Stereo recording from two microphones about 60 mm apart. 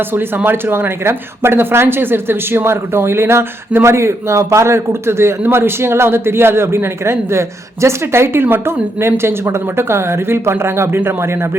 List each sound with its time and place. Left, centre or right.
0.1 s speech: right